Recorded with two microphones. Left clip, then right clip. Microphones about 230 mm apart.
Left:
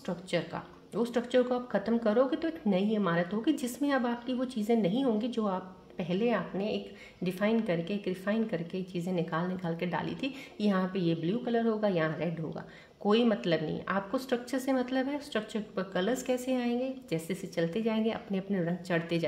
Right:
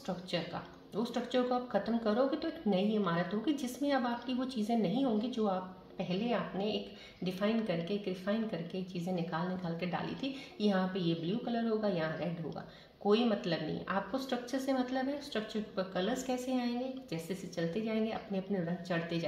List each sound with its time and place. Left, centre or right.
0.9 s speech: left